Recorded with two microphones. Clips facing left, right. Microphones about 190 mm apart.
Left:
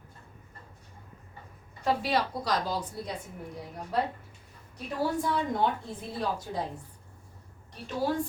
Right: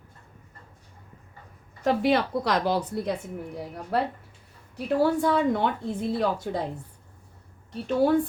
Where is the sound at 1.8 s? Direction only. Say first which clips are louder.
Right 5 dB; 55° right (ahead or behind).